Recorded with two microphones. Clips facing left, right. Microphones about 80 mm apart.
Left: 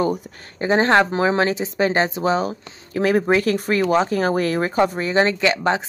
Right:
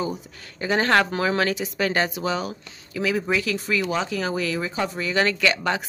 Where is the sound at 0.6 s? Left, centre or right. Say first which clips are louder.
Left 4 dB; left.